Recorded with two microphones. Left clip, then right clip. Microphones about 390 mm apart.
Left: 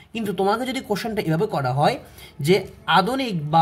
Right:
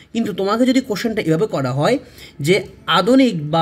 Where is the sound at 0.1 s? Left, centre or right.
Centre.